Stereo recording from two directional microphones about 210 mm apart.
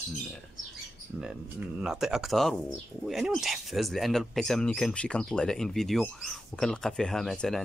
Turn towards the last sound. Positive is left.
turn(degrees=0)  # may be behind; listen again after turning